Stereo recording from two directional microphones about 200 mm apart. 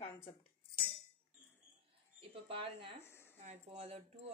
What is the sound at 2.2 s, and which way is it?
Speech, 25° right (ahead or behind).